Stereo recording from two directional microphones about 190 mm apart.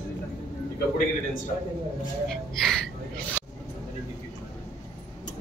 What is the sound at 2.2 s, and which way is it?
Speech, centre (ahead or behind).